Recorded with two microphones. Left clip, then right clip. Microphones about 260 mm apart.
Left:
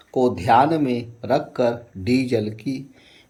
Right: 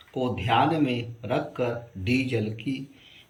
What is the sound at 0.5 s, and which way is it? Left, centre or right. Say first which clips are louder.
Speech: left 5 dB; centre.